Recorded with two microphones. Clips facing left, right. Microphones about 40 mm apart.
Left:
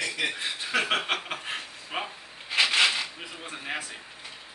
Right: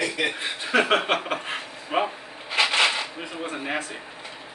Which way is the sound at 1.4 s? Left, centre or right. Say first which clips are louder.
Right 3 dB; centre.